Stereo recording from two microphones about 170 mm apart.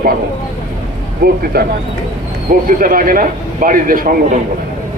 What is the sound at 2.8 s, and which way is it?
A man's voice, 55° right (ahead or behind).